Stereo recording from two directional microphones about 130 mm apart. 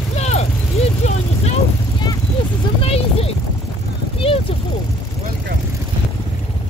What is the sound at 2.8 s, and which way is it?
Vehicle, 50° left (ahead or behind).